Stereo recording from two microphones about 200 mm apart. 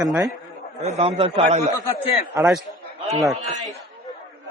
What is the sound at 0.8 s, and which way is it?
Speech, 30° right (ahead or behind).